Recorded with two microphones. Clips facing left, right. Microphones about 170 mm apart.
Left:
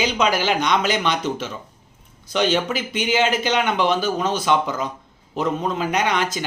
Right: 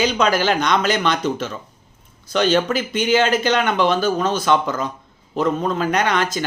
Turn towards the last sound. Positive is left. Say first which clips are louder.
# right 2 dB
turn(degrees=15)  # may be behind; listen again after turning